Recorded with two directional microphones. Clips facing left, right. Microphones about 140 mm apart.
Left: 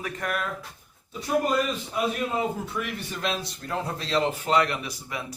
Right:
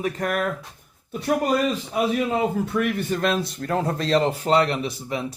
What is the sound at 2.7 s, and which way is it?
Speech, 50° right (ahead or behind).